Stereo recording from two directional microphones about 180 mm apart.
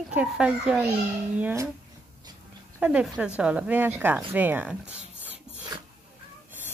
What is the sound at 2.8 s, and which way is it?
Speech, 5° right (ahead or behind).